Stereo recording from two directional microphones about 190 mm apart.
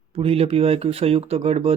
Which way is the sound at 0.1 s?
30° right (ahead or behind).